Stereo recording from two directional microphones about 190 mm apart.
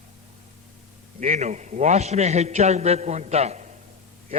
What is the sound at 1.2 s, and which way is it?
A man's voice, 40° right (ahead or behind).